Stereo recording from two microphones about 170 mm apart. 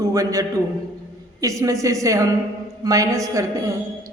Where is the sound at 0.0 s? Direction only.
20° right (ahead or behind).